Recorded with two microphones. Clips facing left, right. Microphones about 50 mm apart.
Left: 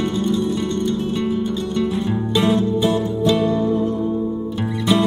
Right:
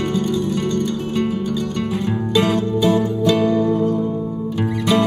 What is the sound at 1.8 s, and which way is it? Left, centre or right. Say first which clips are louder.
Music: left 1 dB; right.